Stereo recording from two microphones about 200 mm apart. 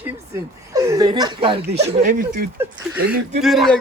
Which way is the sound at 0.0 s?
15° right (ahead or behind).